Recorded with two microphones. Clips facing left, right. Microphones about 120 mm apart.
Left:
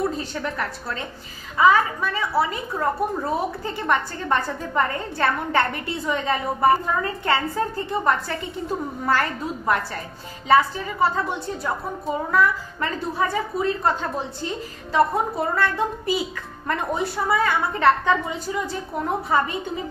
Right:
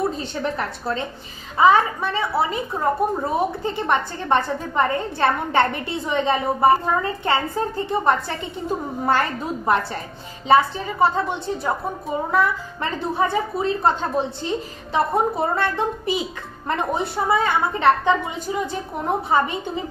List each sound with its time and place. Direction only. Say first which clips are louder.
0.0 s a woman's voice: right 2 dB; 25° right (ahead or behind)
13.3 s a woman's voice: right 2 dB; 25° right (ahead or behind)